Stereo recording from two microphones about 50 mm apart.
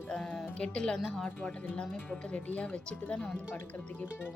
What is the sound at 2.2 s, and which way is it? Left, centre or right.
A woman's voice, left.